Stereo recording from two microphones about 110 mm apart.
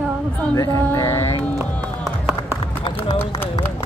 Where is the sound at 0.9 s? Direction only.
25° left (ahead or behind).